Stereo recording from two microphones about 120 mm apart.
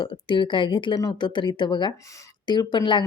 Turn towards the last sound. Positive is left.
turn(degrees=40)  # may be behind; listen again after turning